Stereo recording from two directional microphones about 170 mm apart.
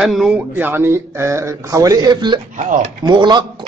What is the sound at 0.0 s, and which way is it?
Speech, centre (ahead or behind).